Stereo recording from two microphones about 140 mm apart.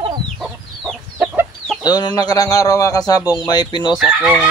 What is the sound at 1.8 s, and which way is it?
Speech, 30° left (ahead or behind).